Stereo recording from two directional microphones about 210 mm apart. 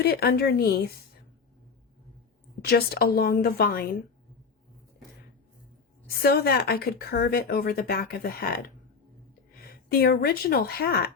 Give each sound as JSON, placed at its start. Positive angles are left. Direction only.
{"t": 0.0, "sound": "speech", "side_deg": 50}
{"t": 2.6, "sound": "speech", "side_deg": 45}
{"t": 6.1, "sound": "speech", "side_deg": 50}